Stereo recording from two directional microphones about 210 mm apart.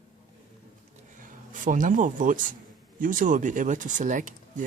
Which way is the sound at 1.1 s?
40° right (ahead or behind).